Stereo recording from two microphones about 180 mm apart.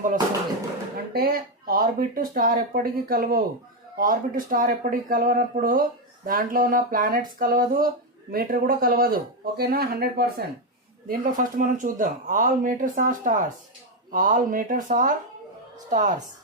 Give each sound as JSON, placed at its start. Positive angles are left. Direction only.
{"t": 1.1, "sound": "speech", "side_deg": -55}